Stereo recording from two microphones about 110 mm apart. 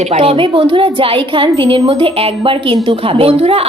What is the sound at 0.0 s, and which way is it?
A woman's voice, 70° right (ahead or behind).